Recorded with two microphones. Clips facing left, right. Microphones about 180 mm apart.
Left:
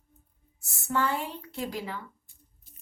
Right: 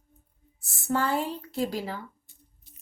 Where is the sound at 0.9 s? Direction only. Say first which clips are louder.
Right 2 dB; 35° right (ahead or behind).